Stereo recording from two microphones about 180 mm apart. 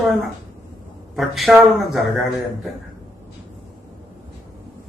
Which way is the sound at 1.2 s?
Centre (ahead or behind).